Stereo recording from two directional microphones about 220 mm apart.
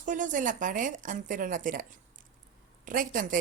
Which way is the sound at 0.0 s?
35° right (ahead or behind).